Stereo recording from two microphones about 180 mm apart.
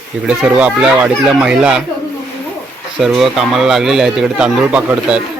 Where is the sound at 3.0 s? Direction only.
Centre (ahead or behind).